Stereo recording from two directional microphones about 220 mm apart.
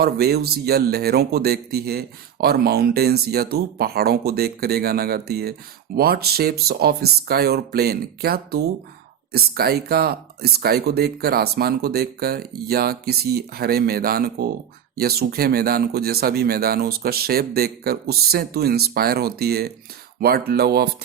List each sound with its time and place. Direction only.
0.0 s speech: 45° right (ahead or behind)